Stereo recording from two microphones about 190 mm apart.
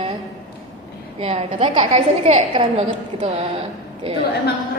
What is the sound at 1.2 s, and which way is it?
A woman's voice, 30° right (ahead or behind).